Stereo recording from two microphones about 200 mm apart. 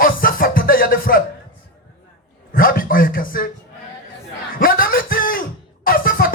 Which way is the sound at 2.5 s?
45° left (ahead or behind).